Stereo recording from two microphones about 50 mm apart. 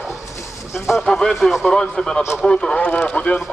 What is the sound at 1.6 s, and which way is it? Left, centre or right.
Speech, centre.